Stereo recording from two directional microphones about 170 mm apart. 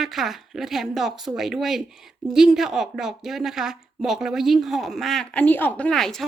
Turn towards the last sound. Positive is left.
turn(degrees=0)  # may be behind; listen again after turning